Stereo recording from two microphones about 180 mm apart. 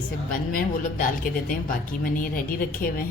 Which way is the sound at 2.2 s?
50° left (ahead or behind).